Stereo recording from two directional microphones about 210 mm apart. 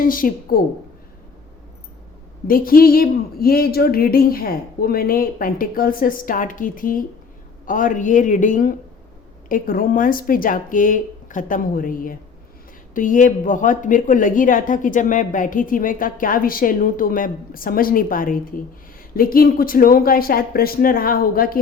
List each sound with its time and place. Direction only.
0.0 s speech: 40° left (ahead or behind)
2.5 s speech: 45° left (ahead or behind)